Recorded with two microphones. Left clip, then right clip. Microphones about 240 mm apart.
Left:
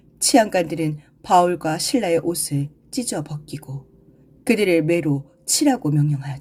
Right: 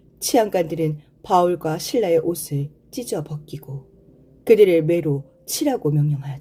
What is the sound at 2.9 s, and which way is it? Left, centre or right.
Speech, left.